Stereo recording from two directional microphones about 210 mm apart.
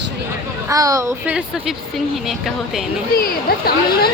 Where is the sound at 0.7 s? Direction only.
15° right (ahead or behind); by 2.8 s centre (ahead or behind).